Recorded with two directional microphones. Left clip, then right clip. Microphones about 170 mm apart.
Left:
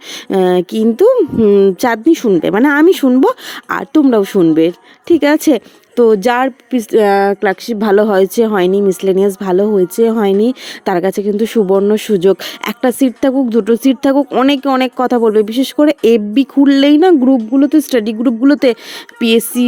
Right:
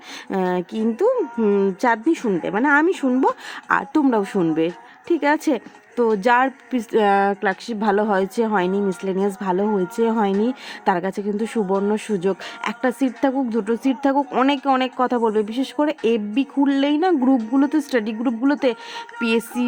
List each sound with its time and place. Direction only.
0.1 s speech: 40° left (ahead or behind)
17.5 s speech: 30° left (ahead or behind)